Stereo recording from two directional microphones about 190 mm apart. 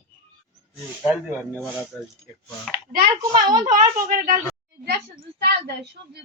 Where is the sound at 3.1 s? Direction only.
20° right (ahead or behind).